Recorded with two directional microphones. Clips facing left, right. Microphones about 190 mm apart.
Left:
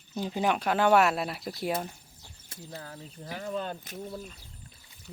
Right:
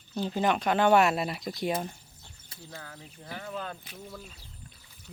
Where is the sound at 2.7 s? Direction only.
35° left (ahead or behind).